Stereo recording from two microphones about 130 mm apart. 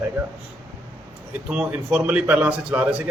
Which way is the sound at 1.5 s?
10° right (ahead or behind).